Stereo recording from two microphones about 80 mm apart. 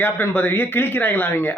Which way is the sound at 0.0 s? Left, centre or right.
Left.